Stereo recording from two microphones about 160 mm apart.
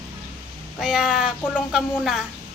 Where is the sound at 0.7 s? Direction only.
5° right (ahead or behind).